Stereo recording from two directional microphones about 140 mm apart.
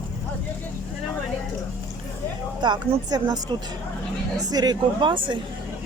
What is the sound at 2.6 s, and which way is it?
A woman's voice, 30° right (ahead or behind).